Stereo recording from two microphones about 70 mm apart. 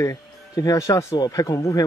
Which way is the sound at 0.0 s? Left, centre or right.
Left.